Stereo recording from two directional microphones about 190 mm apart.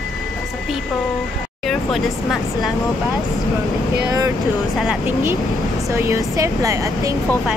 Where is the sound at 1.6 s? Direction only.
Centre (ahead or behind).